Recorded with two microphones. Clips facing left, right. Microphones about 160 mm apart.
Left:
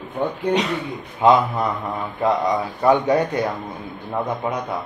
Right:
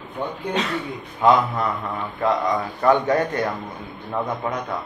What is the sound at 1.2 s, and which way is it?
A man's voice, 20° left (ahead or behind).